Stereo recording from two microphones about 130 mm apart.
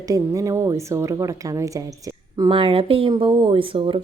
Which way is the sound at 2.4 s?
40° right (ahead or behind).